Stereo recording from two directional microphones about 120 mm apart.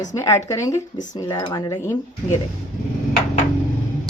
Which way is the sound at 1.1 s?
35° left (ahead or behind).